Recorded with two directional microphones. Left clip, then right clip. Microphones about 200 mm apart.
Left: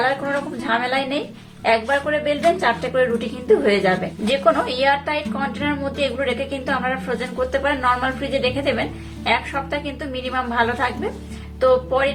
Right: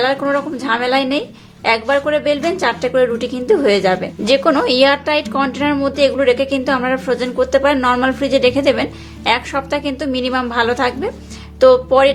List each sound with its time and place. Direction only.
0.0 s a woman's voice: 40° right (ahead or behind)